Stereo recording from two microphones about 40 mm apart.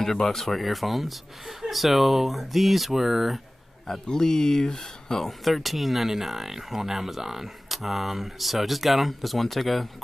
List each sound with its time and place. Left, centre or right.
0.0 s speech: centre
4.1 s speech: centre
5.4 s speech: centre